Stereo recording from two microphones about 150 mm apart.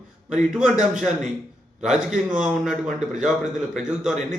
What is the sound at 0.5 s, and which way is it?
A man's voice, 5° right (ahead or behind).